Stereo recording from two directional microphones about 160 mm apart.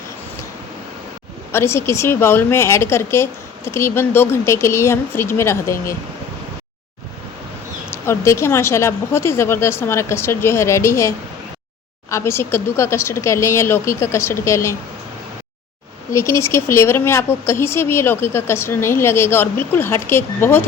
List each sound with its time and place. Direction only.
1.5 s speech: 15° left (ahead or behind)
5.7 s speech: 60° left (ahead or behind)
8.0 s speech: 15° left (ahead or behind)
12.1 s speech: 15° left (ahead or behind)
16.1 s speech: 15° left (ahead or behind)